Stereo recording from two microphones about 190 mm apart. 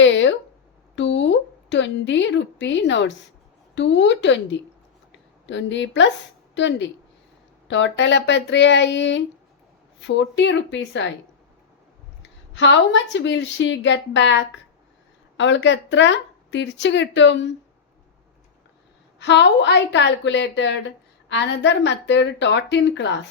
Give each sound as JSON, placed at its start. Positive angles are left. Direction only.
{"t": 0.0, "sound": "a sound", "side_deg": 75}
{"t": 0.9, "sound": "a woman's voice", "side_deg": 70}
{"t": 12.5, "sound": "a woman's voice", "side_deg": 75}
{"t": 19.2, "sound": "a woman's voice", "side_deg": 65}